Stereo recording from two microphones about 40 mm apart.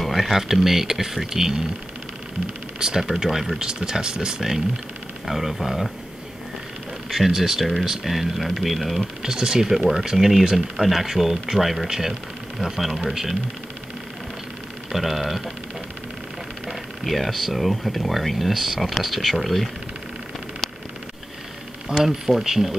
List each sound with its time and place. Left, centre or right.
0.0 s speech: centre
2.8 s speech: centre
3.6 s speech: centre
7.1 s speech: centre
9.2 s speech: centre
14.9 s speech: centre
16.6 s speech: centre
21.9 s speech: right
22.3 s speech: centre